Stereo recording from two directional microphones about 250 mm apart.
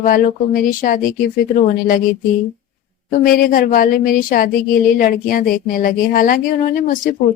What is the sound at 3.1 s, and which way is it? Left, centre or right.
A woman's voice, left.